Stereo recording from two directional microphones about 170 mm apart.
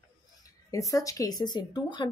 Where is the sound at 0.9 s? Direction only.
20° left (ahead or behind).